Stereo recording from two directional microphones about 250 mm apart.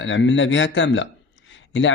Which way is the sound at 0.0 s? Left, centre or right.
Left.